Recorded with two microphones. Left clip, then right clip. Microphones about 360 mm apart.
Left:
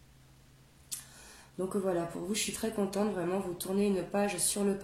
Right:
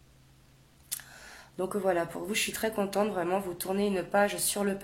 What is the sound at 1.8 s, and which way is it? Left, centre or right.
Speech, right.